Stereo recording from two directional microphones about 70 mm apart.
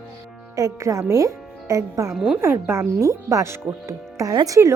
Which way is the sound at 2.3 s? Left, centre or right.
Right.